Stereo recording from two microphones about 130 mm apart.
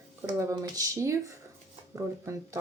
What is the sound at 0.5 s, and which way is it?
Speech, 25° right (ahead or behind).